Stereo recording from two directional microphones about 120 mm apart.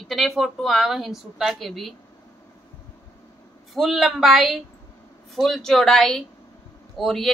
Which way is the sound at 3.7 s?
Centre (ahead or behind).